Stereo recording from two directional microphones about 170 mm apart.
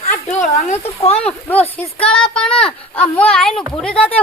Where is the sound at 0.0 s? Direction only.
40° left (ahead or behind).